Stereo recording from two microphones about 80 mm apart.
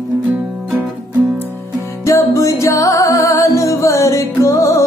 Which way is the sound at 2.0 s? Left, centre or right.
Left.